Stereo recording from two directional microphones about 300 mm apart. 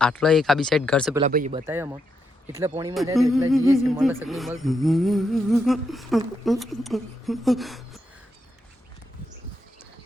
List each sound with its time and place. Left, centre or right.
0.0 s speech: centre
1.2 s speech: right
1.5 s speech: centre
2.9 s speech: centre